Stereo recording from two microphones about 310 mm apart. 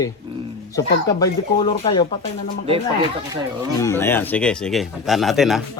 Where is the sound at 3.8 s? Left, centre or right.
Centre.